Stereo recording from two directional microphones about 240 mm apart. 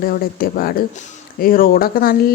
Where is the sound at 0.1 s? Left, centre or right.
Left.